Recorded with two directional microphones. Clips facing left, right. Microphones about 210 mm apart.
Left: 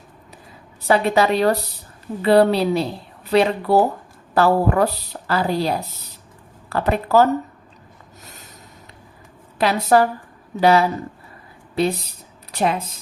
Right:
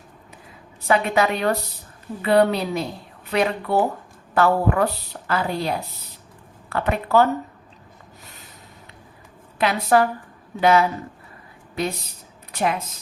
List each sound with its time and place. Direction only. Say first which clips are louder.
0.8 s a woman's voice: left 3 dB; 35° left (ahead or behind)
9.6 s a woman's voice: left 2 dB; 35° left (ahead or behind)